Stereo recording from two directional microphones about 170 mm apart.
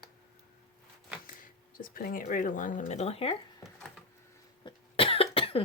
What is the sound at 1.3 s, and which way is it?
Speech, 55° left (ahead or behind).